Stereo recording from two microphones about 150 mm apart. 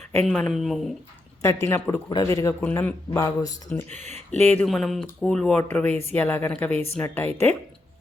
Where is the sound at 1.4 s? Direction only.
20° left (ahead or behind).